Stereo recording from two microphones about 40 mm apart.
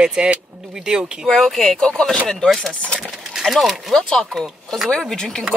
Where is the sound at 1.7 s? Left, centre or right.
Left.